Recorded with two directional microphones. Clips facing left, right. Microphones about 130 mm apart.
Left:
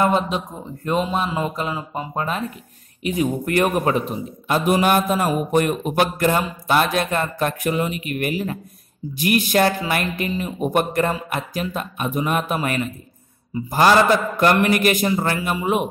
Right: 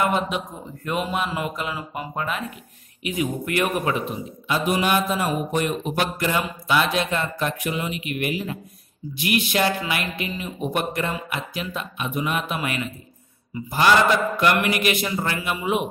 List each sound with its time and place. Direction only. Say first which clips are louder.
0.0 s a man's voice: left 3 dB; 30° left (ahead or behind)